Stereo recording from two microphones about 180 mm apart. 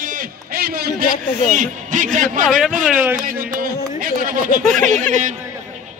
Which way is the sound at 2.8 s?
5° right (ahead or behind).